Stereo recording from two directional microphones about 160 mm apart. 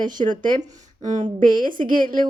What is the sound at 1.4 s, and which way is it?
Speech, 60° right (ahead or behind).